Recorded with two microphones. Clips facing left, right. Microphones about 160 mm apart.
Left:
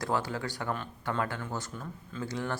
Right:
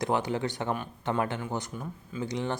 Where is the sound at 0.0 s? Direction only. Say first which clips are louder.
Right 4 dB; 20° right (ahead or behind).